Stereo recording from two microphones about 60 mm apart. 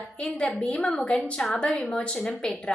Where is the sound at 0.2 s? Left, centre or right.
Centre.